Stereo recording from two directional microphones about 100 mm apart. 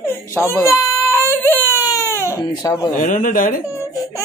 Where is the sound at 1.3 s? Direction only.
20° left (ahead or behind).